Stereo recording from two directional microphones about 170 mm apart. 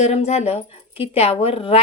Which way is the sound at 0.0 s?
40° left (ahead or behind).